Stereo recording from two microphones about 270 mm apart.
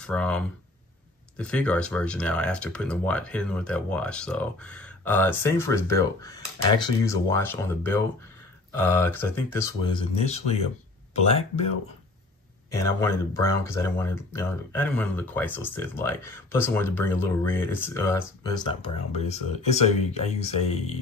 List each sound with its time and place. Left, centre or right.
0.0 s speech: centre; by 11.6 s left
12.7 s speech: centre